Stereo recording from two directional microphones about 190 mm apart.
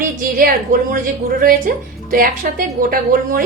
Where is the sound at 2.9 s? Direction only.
45° right (ahead or behind).